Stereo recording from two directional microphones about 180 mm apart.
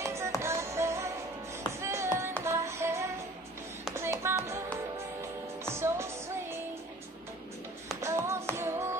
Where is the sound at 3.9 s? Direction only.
15° right (ahead or behind).